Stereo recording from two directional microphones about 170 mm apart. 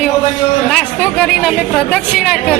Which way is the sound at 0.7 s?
5° left (ahead or behind).